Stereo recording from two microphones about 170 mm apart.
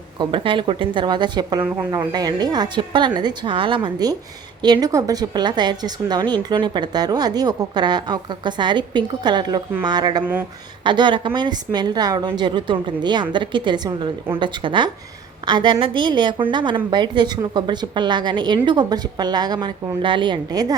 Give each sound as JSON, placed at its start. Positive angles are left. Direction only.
{"t": 0.2, "sound": "a woman's voice", "side_deg": -30}